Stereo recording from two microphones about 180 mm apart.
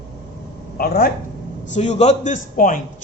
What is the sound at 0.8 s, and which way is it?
Speech, 55° left (ahead or behind).